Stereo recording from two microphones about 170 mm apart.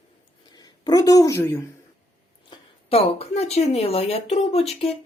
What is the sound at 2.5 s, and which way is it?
Speech, 35° left (ahead or behind).